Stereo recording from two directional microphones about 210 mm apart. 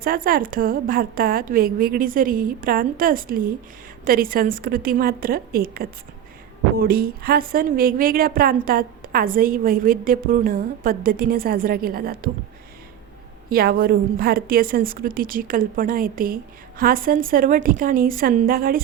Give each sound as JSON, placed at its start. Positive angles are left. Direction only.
{"t": 0.0, "sound": "a woman's voice", "side_deg": -45}
{"t": 13.5, "sound": "a woman's voice", "side_deg": -45}